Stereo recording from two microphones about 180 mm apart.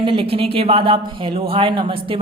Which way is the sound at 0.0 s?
30° right (ahead or behind).